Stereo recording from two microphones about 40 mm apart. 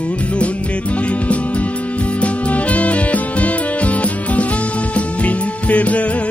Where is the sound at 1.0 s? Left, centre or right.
Left.